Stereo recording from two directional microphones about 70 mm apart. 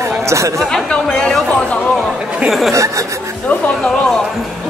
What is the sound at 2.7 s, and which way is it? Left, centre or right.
Speech, right.